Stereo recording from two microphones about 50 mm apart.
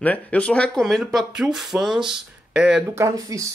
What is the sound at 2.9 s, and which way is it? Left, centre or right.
Speech, right.